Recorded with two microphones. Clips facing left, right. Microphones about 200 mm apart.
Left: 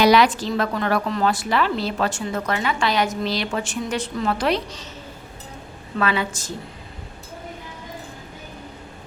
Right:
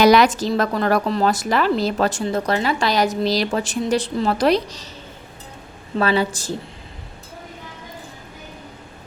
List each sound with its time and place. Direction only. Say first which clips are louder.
0.0 s a woman's voice: right 2 dB; 45° right (ahead or behind)
6.0 s a woman's voice: right 4 dB; 35° right (ahead or behind)